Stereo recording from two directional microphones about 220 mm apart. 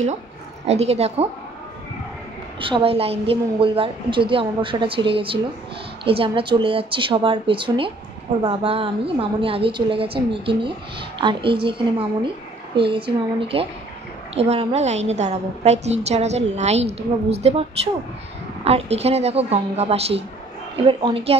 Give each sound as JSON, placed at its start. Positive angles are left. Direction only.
{"t": 0.7, "sound": "a woman's voice", "side_deg": -30}
{"t": 2.6, "sound": "a woman's voice", "side_deg": -25}